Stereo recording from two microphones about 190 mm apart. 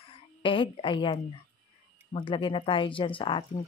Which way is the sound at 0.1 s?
25° left (ahead or behind).